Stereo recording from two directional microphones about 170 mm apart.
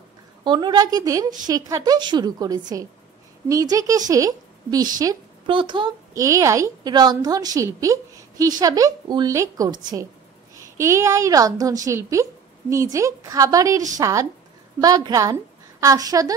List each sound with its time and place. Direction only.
0.4 s a woman's voice: 25° right (ahead or behind)